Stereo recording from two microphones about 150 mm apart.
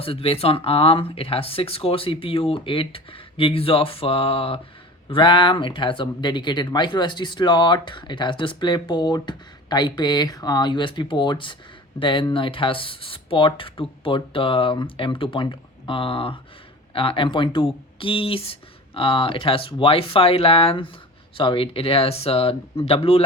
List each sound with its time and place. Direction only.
0.0 s speech: 40° left (ahead or behind)